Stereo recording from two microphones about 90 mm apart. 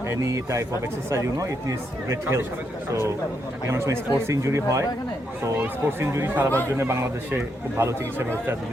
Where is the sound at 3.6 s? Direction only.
30° right (ahead or behind).